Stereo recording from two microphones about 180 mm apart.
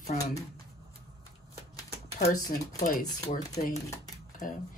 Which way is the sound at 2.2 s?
45° left (ahead or behind).